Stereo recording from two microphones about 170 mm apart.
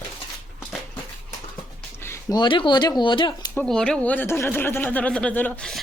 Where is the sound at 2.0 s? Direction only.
15° left (ahead or behind).